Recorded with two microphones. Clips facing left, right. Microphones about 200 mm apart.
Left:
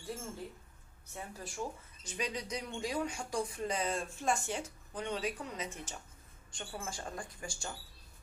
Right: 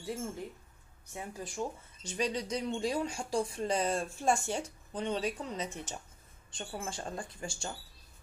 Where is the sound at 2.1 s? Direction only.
35° right (ahead or behind).